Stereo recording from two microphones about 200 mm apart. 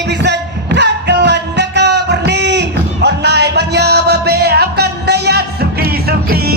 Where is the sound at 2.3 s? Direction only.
60° right (ahead or behind).